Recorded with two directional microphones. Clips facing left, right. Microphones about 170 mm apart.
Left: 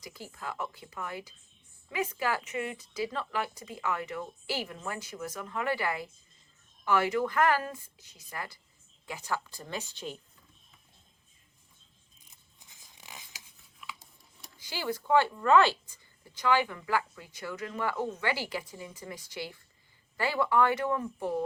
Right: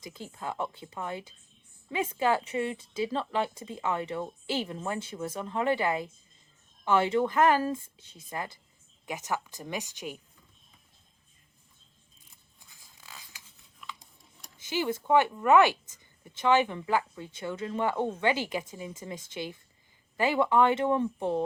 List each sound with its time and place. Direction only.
0.0 s a woman's voice: 25° right (ahead or behind)
12.5 s zipper: 20° left (ahead or behind)
13.7 s a sound: 5° left (ahead or behind)
14.6 s a woman's voice: 20° right (ahead or behind)